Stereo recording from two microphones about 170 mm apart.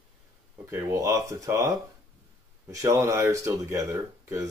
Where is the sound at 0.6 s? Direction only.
15° right (ahead or behind).